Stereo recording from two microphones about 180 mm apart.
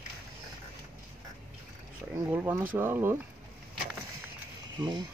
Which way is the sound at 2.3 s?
10° right (ahead or behind).